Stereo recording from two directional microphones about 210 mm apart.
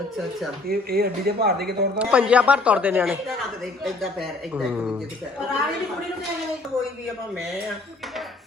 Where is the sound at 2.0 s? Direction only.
5° right (ahead or behind).